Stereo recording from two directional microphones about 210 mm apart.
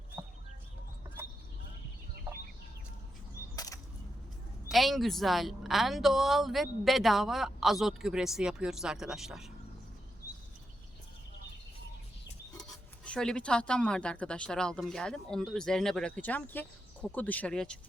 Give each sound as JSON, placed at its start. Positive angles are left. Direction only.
{"t": 3.5, "sound": "a sound", "side_deg": 15}
{"t": 4.7, "sound": "speech", "side_deg": 0}
{"t": 13.1, "sound": "speech", "side_deg": 5}